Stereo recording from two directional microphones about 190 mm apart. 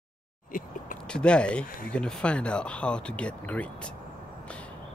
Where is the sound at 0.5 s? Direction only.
45° left (ahead or behind).